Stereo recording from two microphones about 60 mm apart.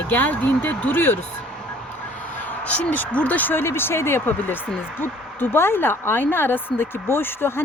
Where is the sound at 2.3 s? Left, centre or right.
Left.